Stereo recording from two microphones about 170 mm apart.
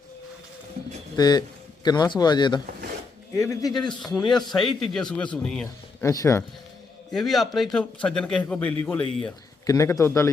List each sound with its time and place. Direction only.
1.1 s speech: 25° left (ahead or behind)
4.3 s a man's voice: centre (ahead or behind)
6.0 s a man's voice: 15° left (ahead or behind)
7.1 s a man's voice: centre (ahead or behind); by 10.2 s 15° left (ahead or behind)